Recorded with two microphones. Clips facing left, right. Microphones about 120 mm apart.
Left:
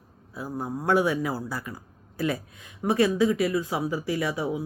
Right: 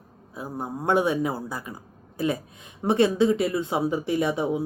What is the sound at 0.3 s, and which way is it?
Speech, 20° right (ahead or behind).